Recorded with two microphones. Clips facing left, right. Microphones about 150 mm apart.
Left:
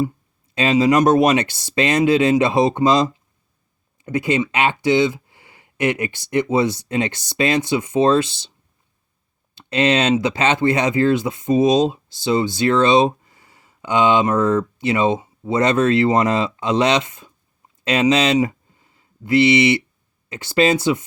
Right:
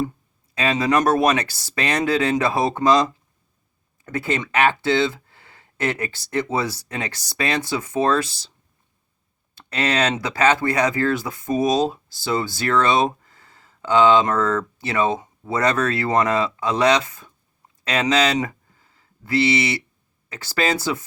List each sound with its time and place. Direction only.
0.5 s speech: 25° left (ahead or behind)
9.6 s speech: 20° left (ahead or behind)
18.4 s a sound: 20° left (ahead or behind)
20.3 s speech: 25° left (ahead or behind)